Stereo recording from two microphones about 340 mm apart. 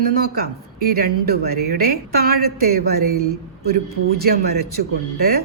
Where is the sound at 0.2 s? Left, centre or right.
Right.